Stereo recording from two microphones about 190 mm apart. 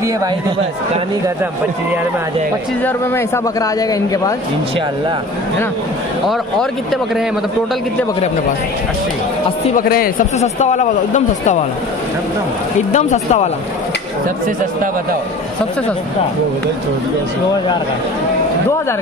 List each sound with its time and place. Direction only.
1.2 s speech: 10° right (ahead or behind)
2.8 s a man's voice: 10° left (ahead or behind)
6.2 s speech: centre (ahead or behind)
9.7 s speech: 50° left (ahead or behind)
10.3 s speech: 35° left (ahead or behind)
12.9 s speech: 35° left (ahead or behind)